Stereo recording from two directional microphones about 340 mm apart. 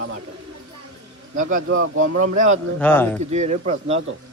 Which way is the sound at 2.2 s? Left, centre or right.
Right.